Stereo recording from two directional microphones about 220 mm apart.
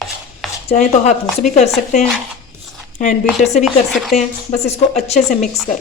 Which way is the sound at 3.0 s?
30° left (ahead or behind).